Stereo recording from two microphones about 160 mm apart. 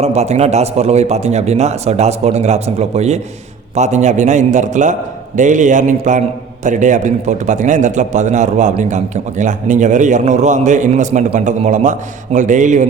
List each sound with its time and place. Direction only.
0.0 s a man's voice: 40° right (ahead or behind)